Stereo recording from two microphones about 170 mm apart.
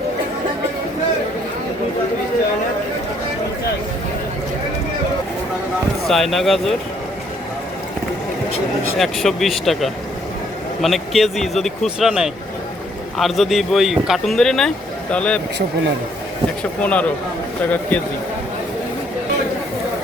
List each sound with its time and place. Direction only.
6.1 s speech: centre (ahead or behind)
9.0 s speech: centre (ahead or behind)
16.8 s speech: 10° left (ahead or behind)